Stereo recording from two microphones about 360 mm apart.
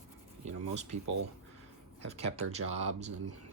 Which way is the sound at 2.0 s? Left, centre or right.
Centre.